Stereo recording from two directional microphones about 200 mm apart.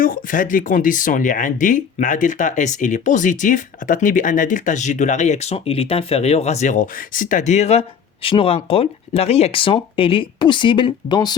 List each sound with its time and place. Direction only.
0.0 s speech: 45° left (ahead or behind); by 11.3 s 20° left (ahead or behind)